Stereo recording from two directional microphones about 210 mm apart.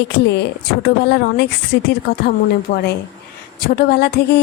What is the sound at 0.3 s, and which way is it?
Speech, 50° left (ahead or behind).